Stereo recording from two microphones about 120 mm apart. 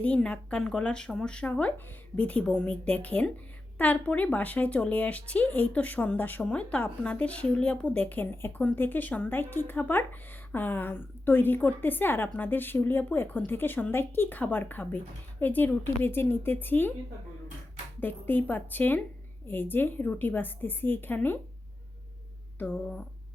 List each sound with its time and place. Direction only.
0.0 s a woman's voice: 10° left (ahead or behind)
18.0 s a woman's voice: 15° left (ahead or behind)
22.5 s a woman's voice: 15° left (ahead or behind)